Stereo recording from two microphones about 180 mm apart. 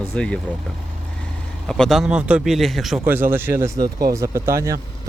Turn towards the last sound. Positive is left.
turn(degrees=-15)  # may be behind; listen again after turning